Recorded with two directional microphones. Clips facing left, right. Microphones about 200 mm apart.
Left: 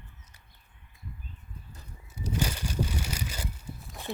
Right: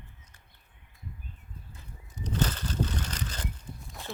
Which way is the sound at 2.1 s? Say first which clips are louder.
Right 1 dB; 10° left (ahead or behind).